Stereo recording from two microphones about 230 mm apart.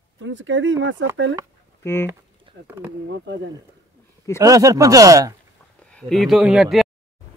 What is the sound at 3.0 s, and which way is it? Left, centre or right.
Speech, right.